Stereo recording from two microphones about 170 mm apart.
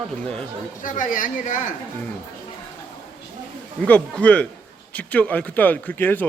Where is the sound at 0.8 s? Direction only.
50° left (ahead or behind).